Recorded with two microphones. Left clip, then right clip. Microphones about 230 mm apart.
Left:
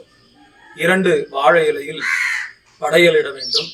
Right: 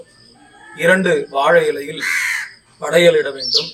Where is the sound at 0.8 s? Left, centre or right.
Centre.